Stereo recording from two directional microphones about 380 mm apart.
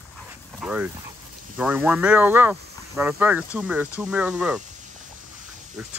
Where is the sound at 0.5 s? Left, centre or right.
Centre.